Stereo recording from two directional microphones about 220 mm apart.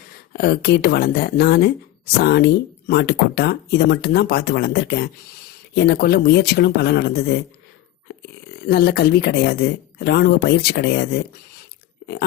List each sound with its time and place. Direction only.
0.3 s speech: 45° left (ahead or behind)
8.6 s speech: 45° left (ahead or behind)